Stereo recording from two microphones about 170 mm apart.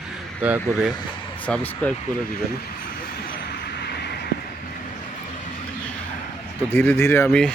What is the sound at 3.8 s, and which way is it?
Vehicle, 75° left (ahead or behind).